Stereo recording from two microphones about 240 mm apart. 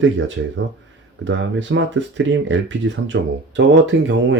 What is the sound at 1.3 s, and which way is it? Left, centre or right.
Speech, right.